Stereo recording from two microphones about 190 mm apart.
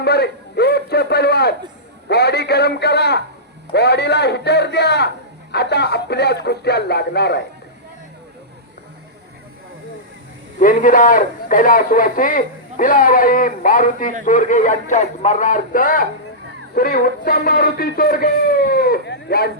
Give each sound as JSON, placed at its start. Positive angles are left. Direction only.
{"t": 0.0, "sound": "a man's voice", "side_deg": 60}
{"t": 10.6, "sound": "a man's voice", "side_deg": 45}